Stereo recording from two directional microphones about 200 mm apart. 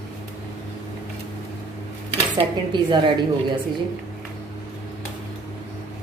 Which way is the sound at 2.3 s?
25° right (ahead or behind).